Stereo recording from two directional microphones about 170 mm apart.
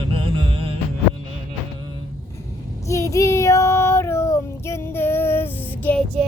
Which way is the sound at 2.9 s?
20° left (ahead or behind).